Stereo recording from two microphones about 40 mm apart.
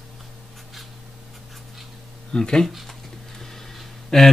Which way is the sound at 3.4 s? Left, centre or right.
Centre.